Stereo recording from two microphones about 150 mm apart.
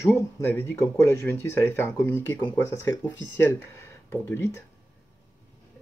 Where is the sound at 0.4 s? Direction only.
15° left (ahead or behind).